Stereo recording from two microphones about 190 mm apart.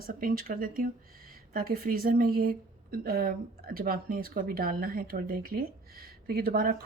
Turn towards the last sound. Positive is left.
turn(degrees=-55)  # may be behind; listen again after turning